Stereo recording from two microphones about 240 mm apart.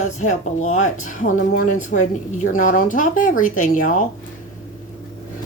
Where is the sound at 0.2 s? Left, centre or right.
Left.